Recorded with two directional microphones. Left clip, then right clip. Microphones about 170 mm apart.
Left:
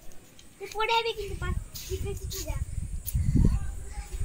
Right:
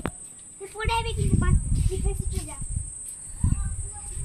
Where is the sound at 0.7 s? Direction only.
35° right (ahead or behind).